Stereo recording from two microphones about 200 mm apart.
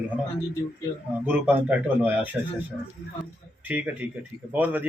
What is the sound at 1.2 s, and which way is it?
Speech, 10° right (ahead or behind).